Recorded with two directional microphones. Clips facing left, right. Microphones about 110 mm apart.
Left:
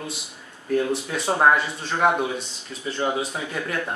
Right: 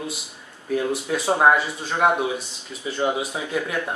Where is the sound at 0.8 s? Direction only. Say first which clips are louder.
Even; 5° right (ahead or behind).